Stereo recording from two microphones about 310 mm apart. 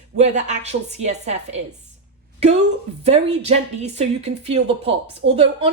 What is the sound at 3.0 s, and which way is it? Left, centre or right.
A woman's voice, centre.